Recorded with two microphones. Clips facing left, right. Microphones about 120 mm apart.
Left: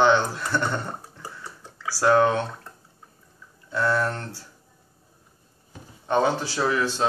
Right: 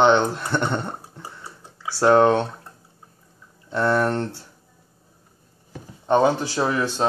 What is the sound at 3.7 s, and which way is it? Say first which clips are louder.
Speech: right 4 dB; 25° right (ahead or behind).